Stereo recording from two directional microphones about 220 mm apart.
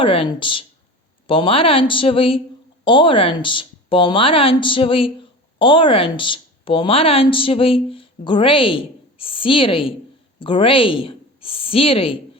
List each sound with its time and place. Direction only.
0.0 s a woman's voice: 25° left (ahead or behind)